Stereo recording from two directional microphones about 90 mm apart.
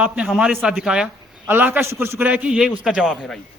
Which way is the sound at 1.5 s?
20° right (ahead or behind).